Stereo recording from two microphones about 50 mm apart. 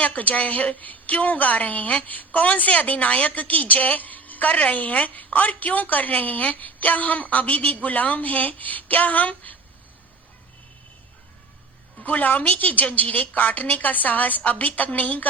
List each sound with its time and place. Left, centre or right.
0.0 s a woman's voice: left
12.0 s a woman's voice: left